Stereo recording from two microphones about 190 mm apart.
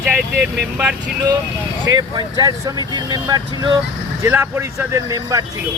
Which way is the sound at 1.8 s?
20° right (ahead or behind).